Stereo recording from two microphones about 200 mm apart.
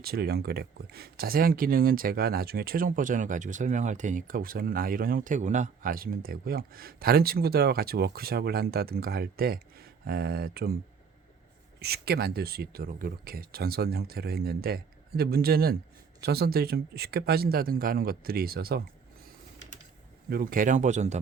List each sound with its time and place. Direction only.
0.0 s speech: 50° right (ahead or behind)
11.8 s speech: 50° right (ahead or behind)
20.3 s speech: 45° right (ahead or behind)